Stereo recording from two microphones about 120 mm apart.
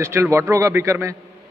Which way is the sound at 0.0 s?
25° right (ahead or behind).